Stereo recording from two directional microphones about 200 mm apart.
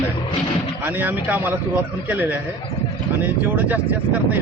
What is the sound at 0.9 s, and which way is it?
A man's voice, 10° right (ahead or behind).